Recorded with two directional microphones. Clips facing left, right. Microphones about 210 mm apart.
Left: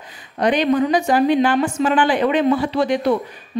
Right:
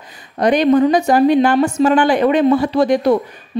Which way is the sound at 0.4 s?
40° right (ahead or behind).